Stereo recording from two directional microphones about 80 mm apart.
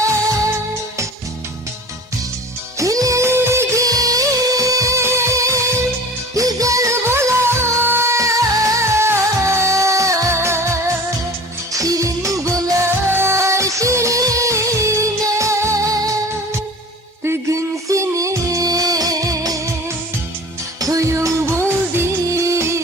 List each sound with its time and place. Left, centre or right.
2.7 s music: right
3.8 s music: right
11.7 s music: right
20.7 s music: right